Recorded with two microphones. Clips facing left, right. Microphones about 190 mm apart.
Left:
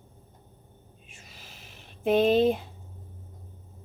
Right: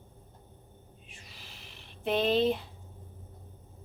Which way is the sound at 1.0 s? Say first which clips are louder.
Left 3 dB; 45° left (ahead or behind).